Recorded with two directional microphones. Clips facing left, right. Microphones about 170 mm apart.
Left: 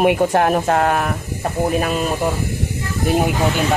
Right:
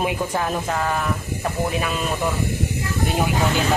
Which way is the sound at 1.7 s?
45° left (ahead or behind).